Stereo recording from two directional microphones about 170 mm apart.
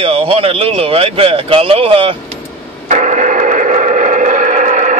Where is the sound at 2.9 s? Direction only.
45° right (ahead or behind).